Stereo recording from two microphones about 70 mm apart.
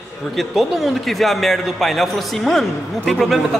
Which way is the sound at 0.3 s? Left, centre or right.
Centre.